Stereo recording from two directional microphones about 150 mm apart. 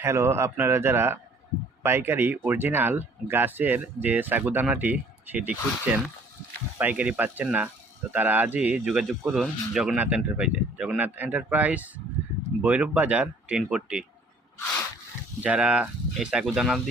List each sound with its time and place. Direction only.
0.0 s speech: 15° right (ahead or behind)
15.4 s speech: 10° right (ahead or behind)